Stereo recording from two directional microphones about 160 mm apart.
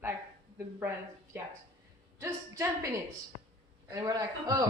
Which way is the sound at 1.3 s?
15° right (ahead or behind).